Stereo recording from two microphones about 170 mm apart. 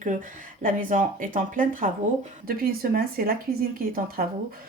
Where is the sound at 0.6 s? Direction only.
50° right (ahead or behind).